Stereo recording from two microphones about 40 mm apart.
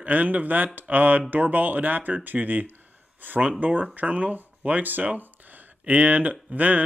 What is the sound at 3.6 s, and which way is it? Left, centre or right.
Speech, right.